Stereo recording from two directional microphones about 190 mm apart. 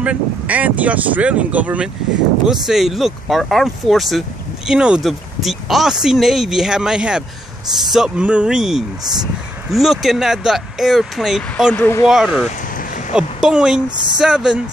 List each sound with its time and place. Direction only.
0.0 s speech: 5° right (ahead or behind); by 12.1 s 10° left (ahead or behind)
12.1 s speech: 5° right (ahead or behind)
13.8 s speech: 25° right (ahead or behind)
14.1 s speech: 5° right (ahead or behind)